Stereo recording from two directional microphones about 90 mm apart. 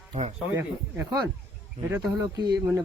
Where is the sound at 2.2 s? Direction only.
50° right (ahead or behind).